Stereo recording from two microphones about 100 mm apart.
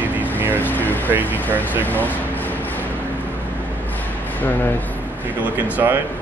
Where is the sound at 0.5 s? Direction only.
20° left (ahead or behind).